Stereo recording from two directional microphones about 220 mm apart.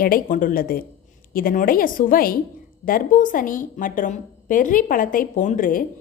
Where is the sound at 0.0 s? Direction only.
40° left (ahead or behind).